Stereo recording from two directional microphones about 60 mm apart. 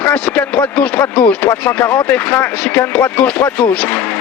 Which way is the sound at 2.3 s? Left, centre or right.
Left.